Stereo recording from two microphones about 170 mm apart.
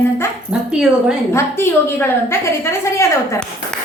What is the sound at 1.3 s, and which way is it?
A woman's voice, 15° left (ahead or behind).